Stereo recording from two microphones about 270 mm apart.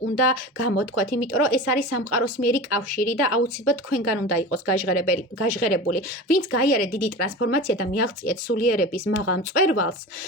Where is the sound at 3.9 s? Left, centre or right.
Left.